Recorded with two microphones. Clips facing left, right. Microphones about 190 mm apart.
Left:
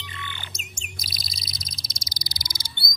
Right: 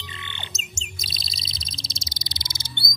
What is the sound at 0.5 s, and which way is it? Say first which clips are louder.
Chirp: right 2 dB; 25° right (ahead or behind).